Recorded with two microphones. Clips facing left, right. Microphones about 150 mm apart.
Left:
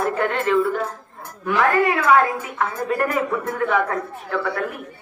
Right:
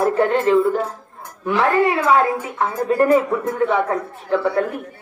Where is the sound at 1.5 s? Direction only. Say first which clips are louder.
Right 2 dB; 30° right (ahead or behind).